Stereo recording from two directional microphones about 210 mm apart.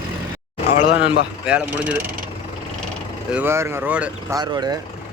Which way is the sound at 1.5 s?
5° right (ahead or behind).